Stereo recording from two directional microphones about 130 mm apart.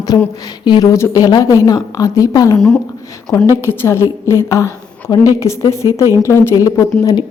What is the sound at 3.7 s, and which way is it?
A woman's voice, 20° left (ahead or behind).